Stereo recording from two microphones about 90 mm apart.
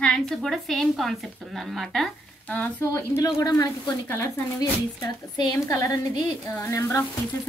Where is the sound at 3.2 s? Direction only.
40° left (ahead or behind).